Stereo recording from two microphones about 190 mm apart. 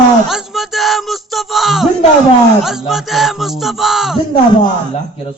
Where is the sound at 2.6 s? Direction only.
Centre (ahead or behind).